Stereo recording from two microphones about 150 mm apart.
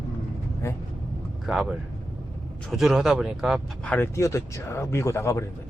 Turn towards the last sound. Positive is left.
turn(degrees=20)  # may be behind; listen again after turning